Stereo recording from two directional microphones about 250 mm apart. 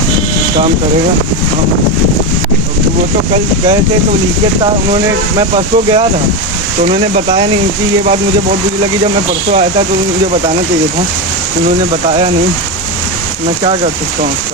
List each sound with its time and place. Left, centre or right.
5.5 s speech: right